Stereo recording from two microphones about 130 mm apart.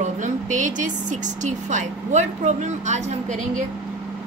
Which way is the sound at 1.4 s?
70° right (ahead or behind).